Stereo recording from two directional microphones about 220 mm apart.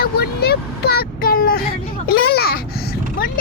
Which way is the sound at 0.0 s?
45° left (ahead or behind).